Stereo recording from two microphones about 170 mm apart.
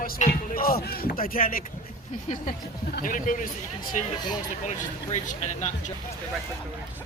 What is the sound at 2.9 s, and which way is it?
Speech, 55° left (ahead or behind).